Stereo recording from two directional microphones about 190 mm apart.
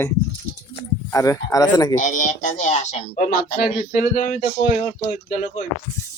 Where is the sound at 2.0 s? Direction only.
40° left (ahead or behind).